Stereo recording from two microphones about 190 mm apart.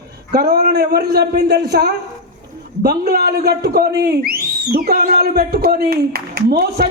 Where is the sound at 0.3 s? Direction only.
55° right (ahead or behind).